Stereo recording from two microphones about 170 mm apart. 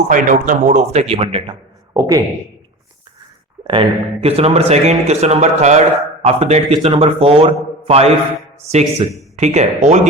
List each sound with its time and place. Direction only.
0.1 s a man's voice: 50° right (ahead or behind); by 1.5 s 35° right (ahead or behind)
1.9 s speech: 20° right (ahead or behind)
3.7 s a man's voice: 35° right (ahead or behind)